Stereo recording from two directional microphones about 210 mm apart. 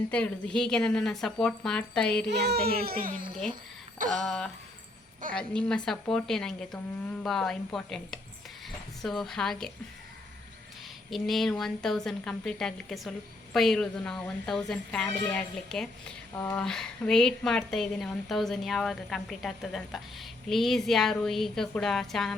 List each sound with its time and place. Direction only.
0.1 s a woman's voice: 5° left (ahead or behind)
2.3 s a child's voice: 50° right (ahead or behind)
4.0 s a sound: 40° right (ahead or behind)
5.3 s a woman's voice: 5° left (ahead or behind)
11.1 s a woman's voice: centre (ahead or behind)